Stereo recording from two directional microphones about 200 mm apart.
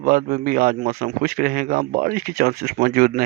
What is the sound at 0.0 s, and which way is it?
Speech, 45° right (ahead or behind).